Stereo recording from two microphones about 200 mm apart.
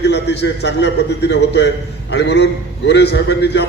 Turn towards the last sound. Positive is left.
turn(degrees=60)  # may be behind; listen again after turning